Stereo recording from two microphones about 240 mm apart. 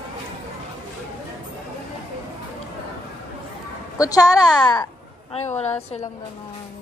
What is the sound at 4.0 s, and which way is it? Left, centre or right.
Speech, centre.